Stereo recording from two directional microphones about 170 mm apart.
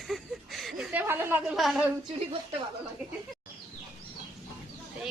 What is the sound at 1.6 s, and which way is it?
Speech, centre (ahead or behind).